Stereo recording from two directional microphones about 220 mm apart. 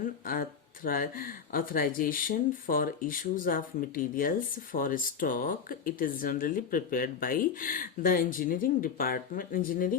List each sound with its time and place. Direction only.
0.0 s speech: 40° left (ahead or behind)